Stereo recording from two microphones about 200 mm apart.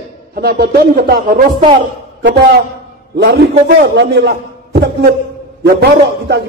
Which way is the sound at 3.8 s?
60° right (ahead or behind).